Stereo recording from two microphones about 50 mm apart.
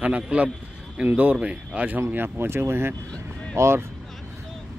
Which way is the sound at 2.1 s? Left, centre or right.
Right.